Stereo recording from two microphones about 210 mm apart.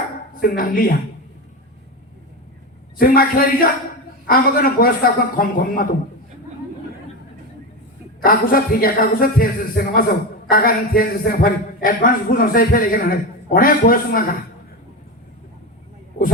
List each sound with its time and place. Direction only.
0.3 s speech: 45° left (ahead or behind)
3.0 s speech: 45° left (ahead or behind)
8.2 s speech: 45° left (ahead or behind)